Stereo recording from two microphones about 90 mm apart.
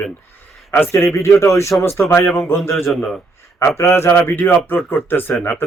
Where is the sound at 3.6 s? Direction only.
30° left (ahead or behind).